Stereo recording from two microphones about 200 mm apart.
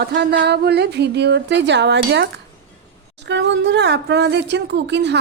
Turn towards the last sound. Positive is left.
turn(degrees=-60)  # may be behind; listen again after turning